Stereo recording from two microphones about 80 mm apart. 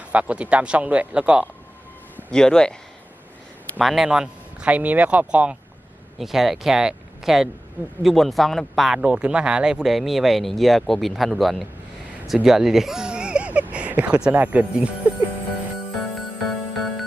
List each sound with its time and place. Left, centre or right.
0.1 s speech: centre
2.3 s speech: centre
3.8 s speech: centre
6.1 s speech: centre
9.0 s speech: centre
16.0 s music: centre